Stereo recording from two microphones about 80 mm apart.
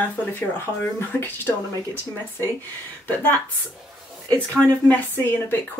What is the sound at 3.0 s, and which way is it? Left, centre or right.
Speech, left.